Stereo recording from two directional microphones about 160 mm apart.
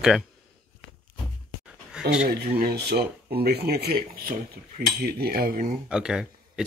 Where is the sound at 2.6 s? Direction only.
85° right; by 5.8 s 60° right (ahead or behind).